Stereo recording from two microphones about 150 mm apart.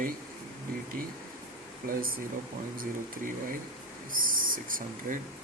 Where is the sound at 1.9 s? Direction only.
70° right (ahead or behind).